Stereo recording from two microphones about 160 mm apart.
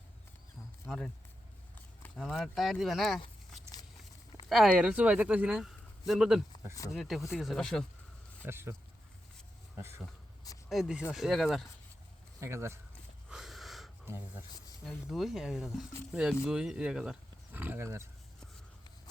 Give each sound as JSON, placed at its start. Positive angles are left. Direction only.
{"t": 0.9, "sound": "speech", "side_deg": 5}
{"t": 8.4, "sound": "speech", "side_deg": -15}
{"t": 10.7, "sound": "speech", "side_deg": 0}
{"t": 12.4, "sound": "speech", "side_deg": -15}
{"t": 13.3, "sound": "a sound", "side_deg": 0}
{"t": 14.8, "sound": "speech", "side_deg": 0}